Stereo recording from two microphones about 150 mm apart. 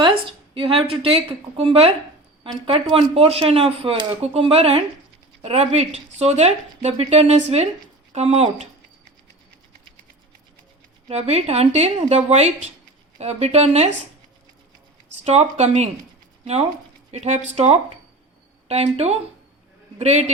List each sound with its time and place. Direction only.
0.0 s a woman's voice: 35° right (ahead or behind)
11.1 s a woman's voice: 45° right (ahead or behind)
15.2 s a woman's voice: 45° right (ahead or behind)